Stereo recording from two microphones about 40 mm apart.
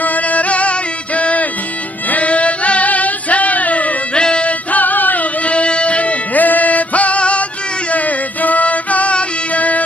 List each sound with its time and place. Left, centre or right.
0.0 s music: left
4.2 s music: left
4.6 s music: left